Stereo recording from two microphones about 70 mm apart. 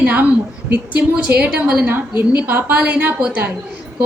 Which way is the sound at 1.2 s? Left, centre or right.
Centre.